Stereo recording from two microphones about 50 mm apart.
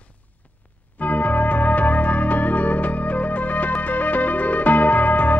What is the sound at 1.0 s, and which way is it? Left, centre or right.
Music, left.